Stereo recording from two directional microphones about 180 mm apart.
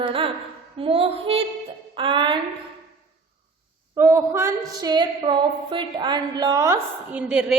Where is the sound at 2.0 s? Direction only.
25° right (ahead or behind).